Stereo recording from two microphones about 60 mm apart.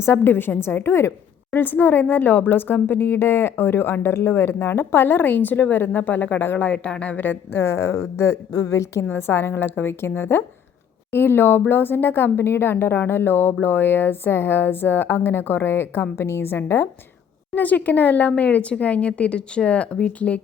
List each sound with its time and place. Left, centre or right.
0.0 s speech: left
1.5 s speech: left
6.7 s speech: left
7.5 s speech: left
8.5 s a woman's voice: left
9.1 s speech: left
17.5 s speech: left